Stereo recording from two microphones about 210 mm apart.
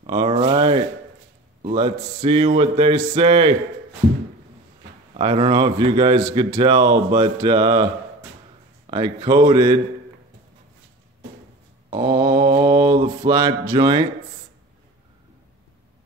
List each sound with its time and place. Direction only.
0.0 s speech: 25° right (ahead or behind)
5.1 s speech: 25° right (ahead or behind)
11.9 s mantra: 20° right (ahead or behind)